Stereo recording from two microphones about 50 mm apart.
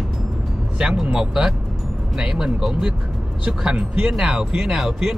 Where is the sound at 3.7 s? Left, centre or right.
Centre.